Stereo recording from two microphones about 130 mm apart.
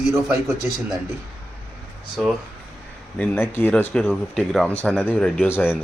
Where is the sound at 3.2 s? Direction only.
15° left (ahead or behind).